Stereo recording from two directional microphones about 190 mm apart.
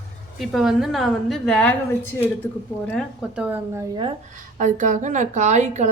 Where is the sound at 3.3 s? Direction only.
10° right (ahead or behind).